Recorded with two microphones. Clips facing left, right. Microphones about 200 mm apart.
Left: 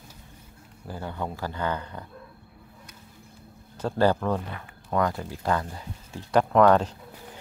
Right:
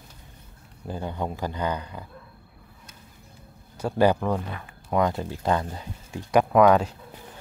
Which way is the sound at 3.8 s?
10° right (ahead or behind).